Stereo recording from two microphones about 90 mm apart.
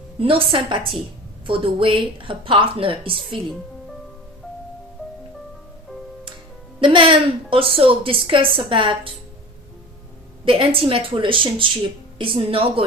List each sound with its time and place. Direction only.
0.2 s a woman's voice: 90° right
6.7 s a woman's voice: 80° right
10.4 s a woman's voice: 80° right
12.2 s a woman's voice: 80° right